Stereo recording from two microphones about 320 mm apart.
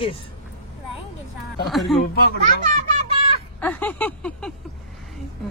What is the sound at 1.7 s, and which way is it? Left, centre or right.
Speech, centre.